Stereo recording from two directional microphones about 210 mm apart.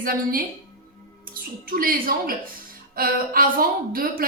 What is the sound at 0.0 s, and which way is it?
Speech, 45° right (ahead or behind).